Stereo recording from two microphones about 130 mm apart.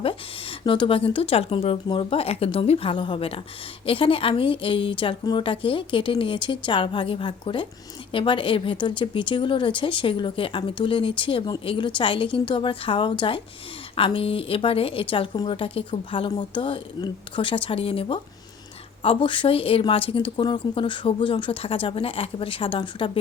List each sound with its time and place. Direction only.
0.6 s a woman's voice: 40° left (ahead or behind)